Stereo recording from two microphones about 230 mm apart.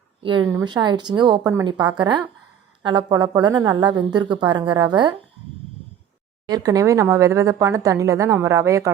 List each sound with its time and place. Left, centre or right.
0.2 s a woman's voice: right
6.5 s speech: centre